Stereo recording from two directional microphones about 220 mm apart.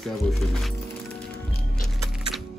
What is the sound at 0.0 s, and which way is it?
Speech, centre (ahead or behind).